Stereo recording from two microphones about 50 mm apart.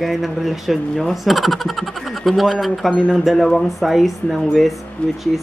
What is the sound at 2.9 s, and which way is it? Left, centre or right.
Speech, centre.